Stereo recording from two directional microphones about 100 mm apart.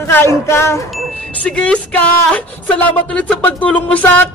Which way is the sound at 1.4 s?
10° left (ahead or behind).